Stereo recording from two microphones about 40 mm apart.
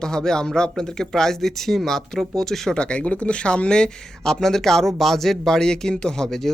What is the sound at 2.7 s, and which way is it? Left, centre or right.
Speech, left.